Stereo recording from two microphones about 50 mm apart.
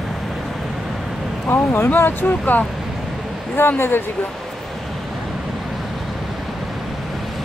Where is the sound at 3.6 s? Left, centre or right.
Left.